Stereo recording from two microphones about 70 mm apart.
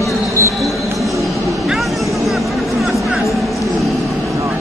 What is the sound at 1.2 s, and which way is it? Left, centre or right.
Vehicle, centre.